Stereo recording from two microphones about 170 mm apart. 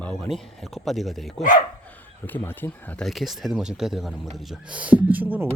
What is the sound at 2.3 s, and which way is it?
Speech, 10° left (ahead or behind).